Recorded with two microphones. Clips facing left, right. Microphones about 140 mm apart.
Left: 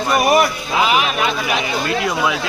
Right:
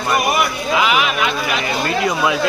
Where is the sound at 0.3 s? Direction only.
35° left (ahead or behind).